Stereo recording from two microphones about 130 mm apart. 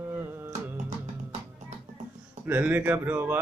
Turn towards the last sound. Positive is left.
turn(degrees=-15)  # may be behind; listen again after turning